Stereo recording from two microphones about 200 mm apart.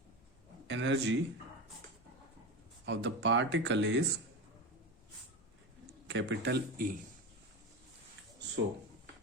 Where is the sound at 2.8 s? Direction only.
60° right (ahead or behind).